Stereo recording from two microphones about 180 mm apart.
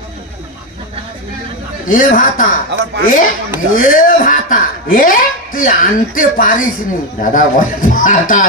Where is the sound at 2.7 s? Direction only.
70° right (ahead or behind).